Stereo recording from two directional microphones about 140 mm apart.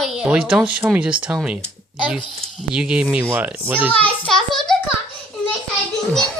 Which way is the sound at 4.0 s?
5° left (ahead or behind).